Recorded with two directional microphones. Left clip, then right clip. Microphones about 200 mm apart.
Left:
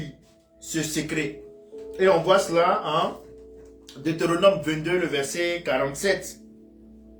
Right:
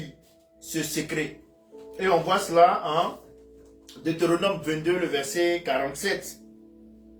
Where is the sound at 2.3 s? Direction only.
20° left (ahead or behind).